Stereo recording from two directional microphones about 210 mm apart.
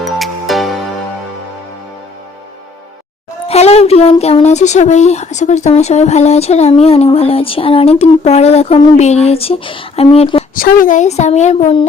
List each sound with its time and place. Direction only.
0.0 s music: centre (ahead or behind)
3.4 s speech: 30° left (ahead or behind)
10.5 s speech: 40° left (ahead or behind)